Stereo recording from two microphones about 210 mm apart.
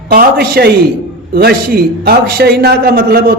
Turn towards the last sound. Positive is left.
turn(degrees=-45)  # may be behind; listen again after turning